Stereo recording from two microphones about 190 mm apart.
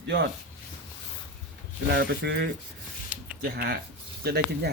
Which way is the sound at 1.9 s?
65° right (ahead or behind).